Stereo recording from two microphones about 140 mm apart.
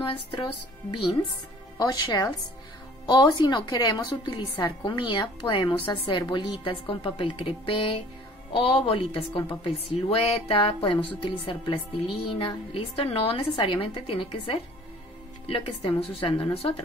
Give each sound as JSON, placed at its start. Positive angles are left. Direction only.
{"t": 0.0, "sound": "speech", "side_deg": 35}
{"t": 1.8, "sound": "a woman's voice", "side_deg": 25}